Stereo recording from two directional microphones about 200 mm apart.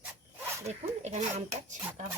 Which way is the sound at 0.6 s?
35° right (ahead or behind).